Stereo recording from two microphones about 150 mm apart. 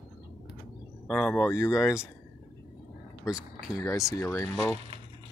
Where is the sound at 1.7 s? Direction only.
5° right (ahead or behind).